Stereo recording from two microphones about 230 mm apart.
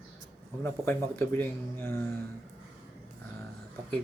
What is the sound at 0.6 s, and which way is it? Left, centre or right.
Speech, centre.